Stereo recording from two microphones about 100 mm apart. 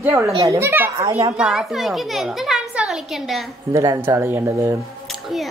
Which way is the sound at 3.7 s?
35° right (ahead or behind).